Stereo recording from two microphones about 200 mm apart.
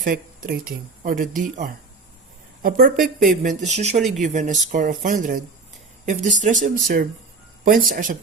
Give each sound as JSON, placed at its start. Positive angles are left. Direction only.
{"t": 0.0, "sound": "speech", "side_deg": -45}
{"t": 3.9, "sound": "speech", "side_deg": 0}
{"t": 4.2, "sound": "speech", "side_deg": -35}